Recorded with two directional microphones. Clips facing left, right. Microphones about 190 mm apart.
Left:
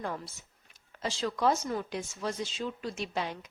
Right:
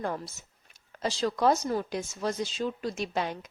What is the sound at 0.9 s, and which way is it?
A woman's voice, 40° right (ahead or behind).